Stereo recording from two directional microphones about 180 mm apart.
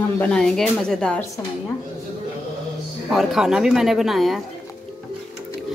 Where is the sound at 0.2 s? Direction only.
5° left (ahead or behind).